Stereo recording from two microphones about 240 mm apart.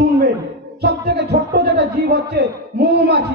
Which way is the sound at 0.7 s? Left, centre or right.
Right.